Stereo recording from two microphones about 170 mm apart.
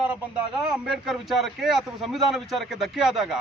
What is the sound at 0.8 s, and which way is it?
A man's voice, centre (ahead or behind).